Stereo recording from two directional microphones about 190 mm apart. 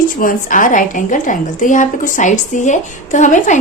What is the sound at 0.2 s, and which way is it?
A woman's voice, 45° left (ahead or behind).